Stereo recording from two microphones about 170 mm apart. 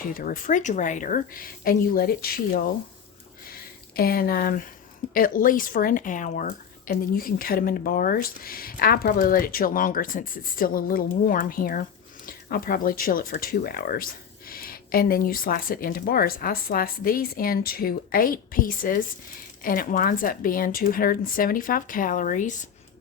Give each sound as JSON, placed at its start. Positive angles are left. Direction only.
{"t": 0.1, "sound": "speech", "side_deg": 55}